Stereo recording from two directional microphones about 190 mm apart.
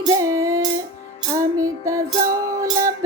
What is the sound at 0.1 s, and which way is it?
Music, 15° right (ahead or behind).